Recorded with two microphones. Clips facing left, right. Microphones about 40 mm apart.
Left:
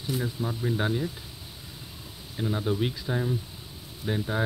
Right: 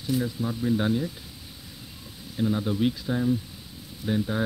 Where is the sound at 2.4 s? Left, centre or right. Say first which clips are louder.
Right 3 dB; centre.